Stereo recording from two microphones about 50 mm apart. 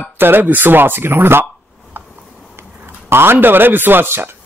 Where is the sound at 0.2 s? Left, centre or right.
Right.